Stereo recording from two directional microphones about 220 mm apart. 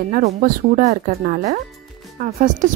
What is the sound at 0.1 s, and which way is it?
A woman's voice, 40° right (ahead or behind).